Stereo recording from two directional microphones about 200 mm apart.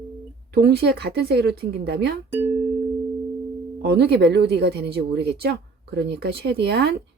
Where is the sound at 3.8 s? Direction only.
55° right (ahead or behind).